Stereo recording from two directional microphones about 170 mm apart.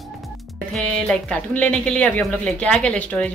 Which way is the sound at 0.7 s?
5° left (ahead or behind).